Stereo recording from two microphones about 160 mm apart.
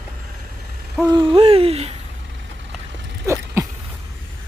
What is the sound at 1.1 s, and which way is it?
Hoot, 30° right (ahead or behind).